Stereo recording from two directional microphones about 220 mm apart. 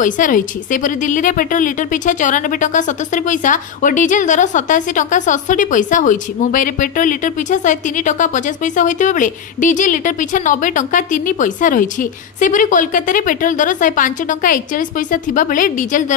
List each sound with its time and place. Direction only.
0.0 s a woman's voice: 35° left (ahead or behind)